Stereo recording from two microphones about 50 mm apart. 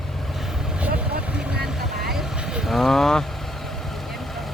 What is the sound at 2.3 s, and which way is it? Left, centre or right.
Vehicle, centre.